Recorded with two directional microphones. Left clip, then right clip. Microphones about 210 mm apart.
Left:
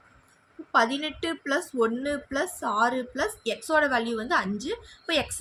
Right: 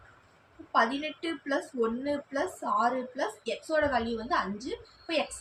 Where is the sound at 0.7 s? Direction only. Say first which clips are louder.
Left 3 dB; 30° left (ahead or behind).